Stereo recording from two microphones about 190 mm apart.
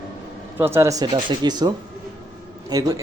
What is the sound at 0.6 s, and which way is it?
Speech, 15° right (ahead or behind).